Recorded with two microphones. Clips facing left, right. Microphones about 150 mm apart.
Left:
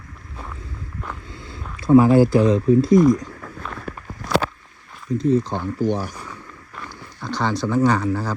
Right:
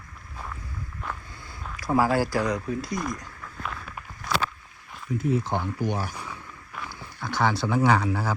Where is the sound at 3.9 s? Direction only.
50° left (ahead or behind).